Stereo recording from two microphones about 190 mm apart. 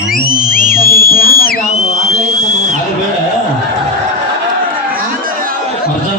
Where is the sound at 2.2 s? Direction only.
40° right (ahead or behind).